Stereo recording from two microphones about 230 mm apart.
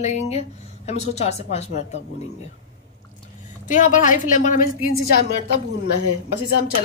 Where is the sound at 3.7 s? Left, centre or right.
Left.